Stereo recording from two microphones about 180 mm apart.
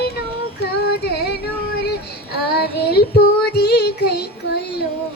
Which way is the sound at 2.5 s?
60° left (ahead or behind).